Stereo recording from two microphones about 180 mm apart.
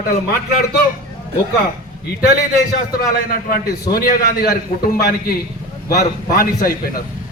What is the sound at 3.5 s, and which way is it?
A man's voice, 55° left (ahead or behind).